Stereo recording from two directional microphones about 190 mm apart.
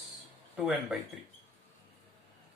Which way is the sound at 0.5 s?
5° right (ahead or behind).